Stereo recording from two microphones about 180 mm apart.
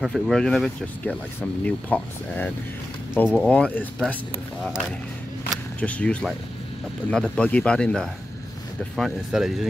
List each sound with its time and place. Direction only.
0.0 s speech: centre (ahead or behind)
5.8 s speech: 5° left (ahead or behind)